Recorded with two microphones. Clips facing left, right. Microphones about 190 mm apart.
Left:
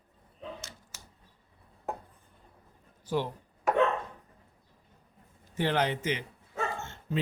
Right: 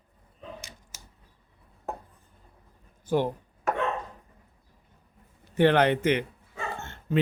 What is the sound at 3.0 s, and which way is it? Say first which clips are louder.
Speech: right 5 dB; 50° right (ahead or behind).